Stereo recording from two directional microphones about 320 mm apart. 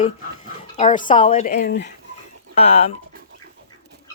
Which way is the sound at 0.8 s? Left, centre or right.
Left.